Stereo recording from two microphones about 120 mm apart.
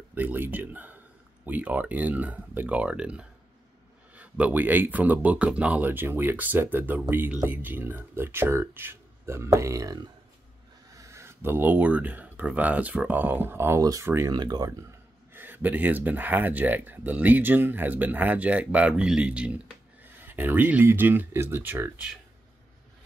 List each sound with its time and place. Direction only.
0.1 s speech: 15° right (ahead or behind)
14.3 s speech: 35° right (ahead or behind)
15.3 s speech: 15° right (ahead or behind)